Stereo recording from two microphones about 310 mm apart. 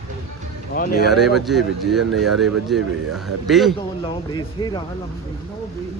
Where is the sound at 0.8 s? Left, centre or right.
Left.